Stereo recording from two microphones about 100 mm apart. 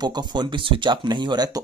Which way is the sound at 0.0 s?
45° right (ahead or behind).